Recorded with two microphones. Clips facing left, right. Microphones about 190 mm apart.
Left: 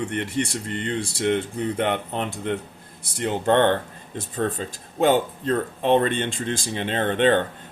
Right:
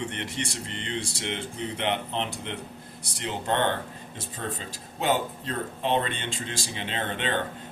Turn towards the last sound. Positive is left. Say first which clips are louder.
# left 10 dB
turn(degrees=50)  # may be behind; listen again after turning